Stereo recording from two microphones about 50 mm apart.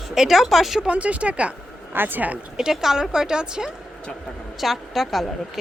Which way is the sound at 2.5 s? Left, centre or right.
Centre.